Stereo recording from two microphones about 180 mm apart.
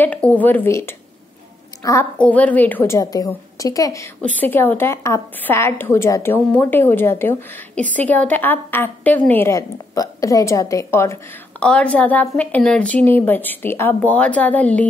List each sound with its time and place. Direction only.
0.0 s a woman's voice: 10° left (ahead or behind)